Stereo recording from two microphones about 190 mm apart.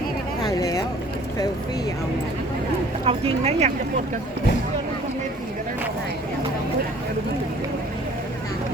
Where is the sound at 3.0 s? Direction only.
30° right (ahead or behind).